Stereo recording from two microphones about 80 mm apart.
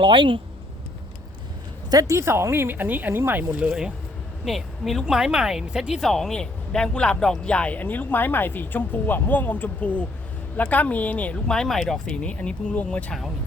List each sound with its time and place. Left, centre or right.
0.0 s speech: right
1.9 s speech: right
3.6 s speech: centre
11.5 s speech: centre